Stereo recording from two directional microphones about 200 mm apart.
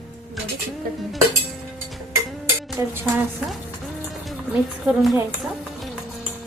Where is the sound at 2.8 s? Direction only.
15° right (ahead or behind).